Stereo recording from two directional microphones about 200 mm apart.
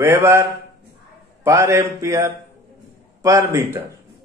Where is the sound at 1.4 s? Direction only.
15° right (ahead or behind).